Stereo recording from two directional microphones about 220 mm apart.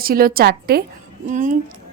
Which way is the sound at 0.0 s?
40° right (ahead or behind).